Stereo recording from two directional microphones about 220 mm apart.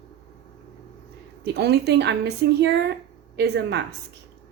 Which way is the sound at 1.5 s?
50° right (ahead or behind).